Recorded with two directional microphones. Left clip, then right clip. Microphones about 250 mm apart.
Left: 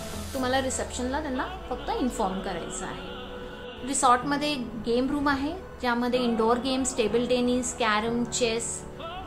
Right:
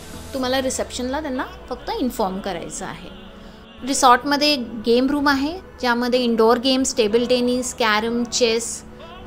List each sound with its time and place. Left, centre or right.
0.4 s a woman's voice: right